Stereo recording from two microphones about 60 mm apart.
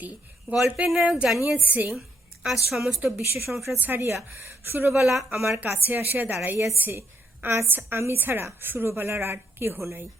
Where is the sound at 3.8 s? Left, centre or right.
Right.